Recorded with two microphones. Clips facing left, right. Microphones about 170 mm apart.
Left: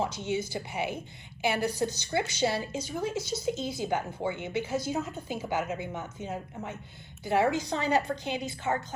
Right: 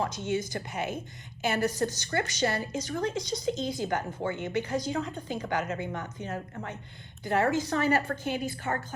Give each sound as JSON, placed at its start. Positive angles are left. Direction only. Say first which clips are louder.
{"t": 0.0, "sound": "a woman's voice", "louder": "even", "side_deg": 10}